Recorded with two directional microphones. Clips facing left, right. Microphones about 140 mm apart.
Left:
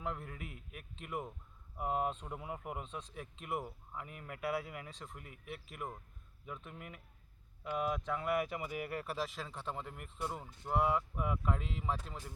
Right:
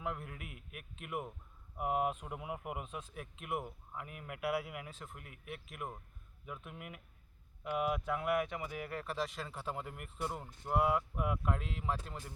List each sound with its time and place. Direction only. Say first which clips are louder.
0.0 s speech: even; 5° right (ahead or behind)